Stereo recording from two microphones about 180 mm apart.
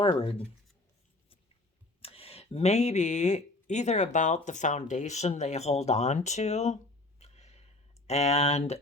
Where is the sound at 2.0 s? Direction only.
35° left (ahead or behind).